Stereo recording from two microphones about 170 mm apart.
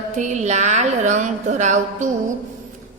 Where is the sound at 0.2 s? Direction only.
45° right (ahead or behind).